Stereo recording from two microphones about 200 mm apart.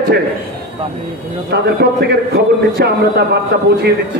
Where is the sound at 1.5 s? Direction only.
55° right (ahead or behind).